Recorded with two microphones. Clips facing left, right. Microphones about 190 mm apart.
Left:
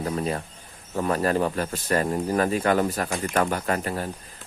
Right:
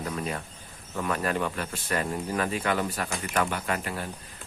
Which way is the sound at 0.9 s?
35° left (ahead or behind).